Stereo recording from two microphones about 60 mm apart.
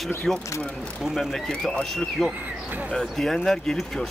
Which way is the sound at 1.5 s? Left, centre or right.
Centre.